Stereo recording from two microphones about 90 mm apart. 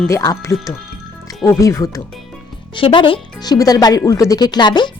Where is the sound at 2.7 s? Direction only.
70° left (ahead or behind).